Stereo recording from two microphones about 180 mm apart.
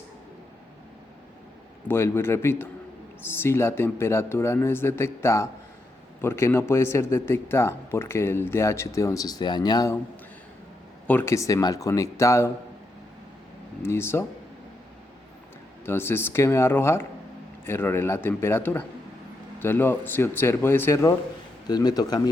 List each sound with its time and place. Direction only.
1.9 s a man's voice: 15° left (ahead or behind)
11.0 s a man's voice: 10° left (ahead or behind)
13.8 s a man's voice: 15° left (ahead or behind)
15.9 s a man's voice: 15° left (ahead or behind)